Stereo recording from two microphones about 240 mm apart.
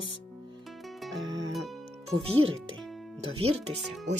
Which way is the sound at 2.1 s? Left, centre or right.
Right.